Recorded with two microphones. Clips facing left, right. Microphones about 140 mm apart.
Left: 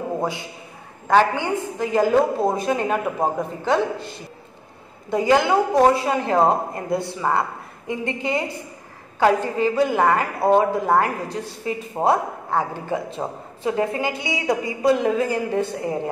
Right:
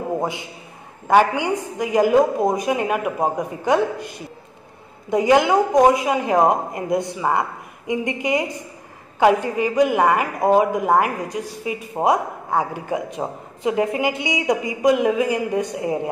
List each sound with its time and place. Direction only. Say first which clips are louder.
0.2 s a man's voice: even; 20° right (ahead or behind)
5.1 s a woman's voice: right 2 dB; 20° right (ahead or behind)